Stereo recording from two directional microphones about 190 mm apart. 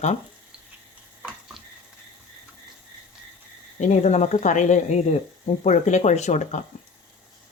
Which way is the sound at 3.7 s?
40° left (ahead or behind).